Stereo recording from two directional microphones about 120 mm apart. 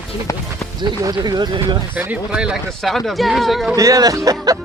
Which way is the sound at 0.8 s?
35° right (ahead or behind).